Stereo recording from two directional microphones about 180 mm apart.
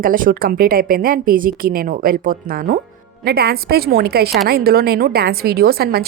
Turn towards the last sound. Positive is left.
turn(degrees=-60)  # may be behind; listen again after turning